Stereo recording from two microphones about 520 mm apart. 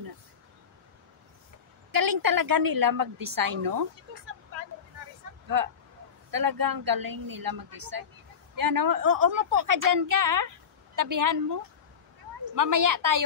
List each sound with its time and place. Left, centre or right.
1.9 s a woman's voice: right
5.5 s a woman's voice: right